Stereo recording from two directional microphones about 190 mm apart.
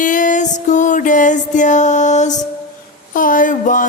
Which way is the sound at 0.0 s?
45° left (ahead or behind).